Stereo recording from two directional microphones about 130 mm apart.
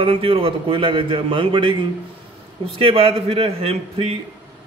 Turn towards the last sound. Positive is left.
turn(degrees=-50)  # may be behind; listen again after turning